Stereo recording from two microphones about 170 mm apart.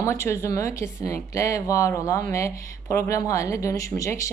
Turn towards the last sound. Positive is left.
turn(degrees=20)  # may be behind; listen again after turning